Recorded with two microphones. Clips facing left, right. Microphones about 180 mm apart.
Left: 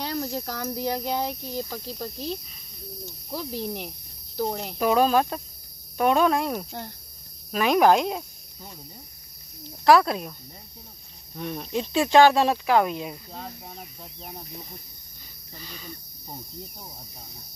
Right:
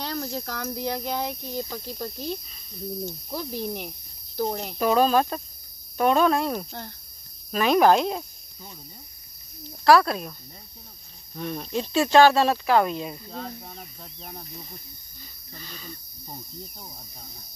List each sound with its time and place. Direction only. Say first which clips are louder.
0.0 s speech: left 1 dB; 10° left (ahead or behind)
3.3 s cricket: left 2 dB; centre (ahead or behind)
4.4 s speech: even; centre (ahead or behind)
9.8 s speech: even; 15° left (ahead or behind)
11.3 s speech: even; 10° left (ahead or behind)
15.5 s speech: left 1 dB; 10° left (ahead or behind)